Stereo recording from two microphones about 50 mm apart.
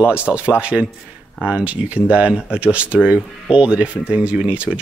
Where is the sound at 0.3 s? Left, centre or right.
Right.